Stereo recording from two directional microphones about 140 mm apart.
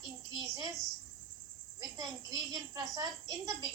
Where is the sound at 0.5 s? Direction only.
25° right (ahead or behind).